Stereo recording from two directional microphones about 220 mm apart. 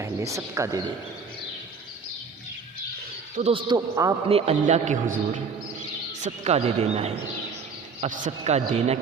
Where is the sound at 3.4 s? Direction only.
25° right (ahead or behind).